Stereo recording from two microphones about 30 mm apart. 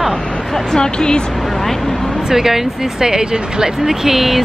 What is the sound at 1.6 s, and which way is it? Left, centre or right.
Speech, centre.